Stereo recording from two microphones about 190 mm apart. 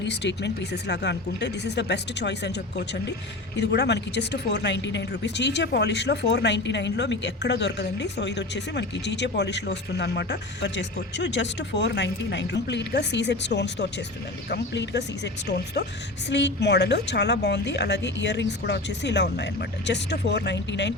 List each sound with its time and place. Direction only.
0.0 s speech: 65° left (ahead or behind)